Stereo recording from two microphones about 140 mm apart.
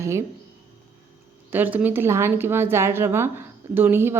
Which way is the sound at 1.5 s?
15° right (ahead or behind).